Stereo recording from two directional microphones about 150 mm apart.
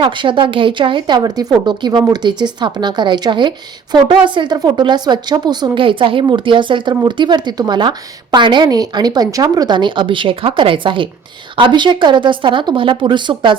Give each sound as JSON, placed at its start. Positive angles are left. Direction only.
{"t": 0.0, "sound": "speech", "side_deg": -30}